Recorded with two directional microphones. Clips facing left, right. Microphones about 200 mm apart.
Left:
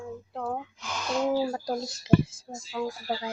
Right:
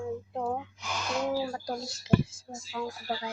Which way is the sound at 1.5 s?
20° left (ahead or behind).